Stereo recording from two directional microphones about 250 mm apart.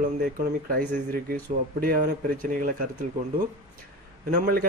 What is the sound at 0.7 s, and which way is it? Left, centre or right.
Speech, right.